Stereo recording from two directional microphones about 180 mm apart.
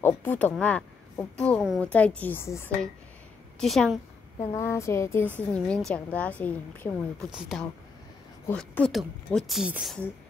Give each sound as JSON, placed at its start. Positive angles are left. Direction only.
{"t": 0.2, "sound": "a woman's voice", "side_deg": 10}
{"t": 3.5, "sound": "a woman's voice", "side_deg": 0}
{"t": 4.4, "sound": "a woman's voice", "side_deg": 15}
{"t": 5.5, "sound": "a woman's voice", "side_deg": 5}
{"t": 7.2, "sound": "a woman's voice", "side_deg": -5}